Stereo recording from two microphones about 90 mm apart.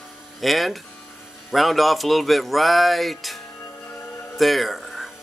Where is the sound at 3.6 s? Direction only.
20° left (ahead or behind).